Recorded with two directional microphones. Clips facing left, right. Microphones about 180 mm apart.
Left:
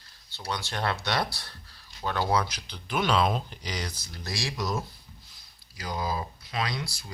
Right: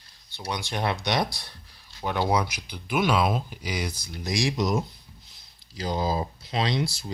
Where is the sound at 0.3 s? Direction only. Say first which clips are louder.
Right 2 dB; 15° right (ahead or behind).